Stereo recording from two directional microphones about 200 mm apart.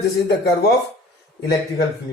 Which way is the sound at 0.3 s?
55° left (ahead or behind).